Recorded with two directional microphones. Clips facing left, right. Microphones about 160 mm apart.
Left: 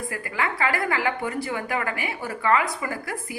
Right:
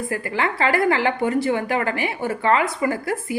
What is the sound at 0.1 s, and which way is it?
A woman's voice, 30° right (ahead or behind).